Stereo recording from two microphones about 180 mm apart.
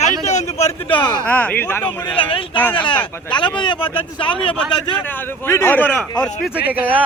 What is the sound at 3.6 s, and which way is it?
Speech, 25° left (ahead or behind).